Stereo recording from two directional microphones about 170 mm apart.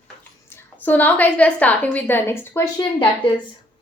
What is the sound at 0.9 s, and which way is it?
A woman's voice, 10° left (ahead or behind).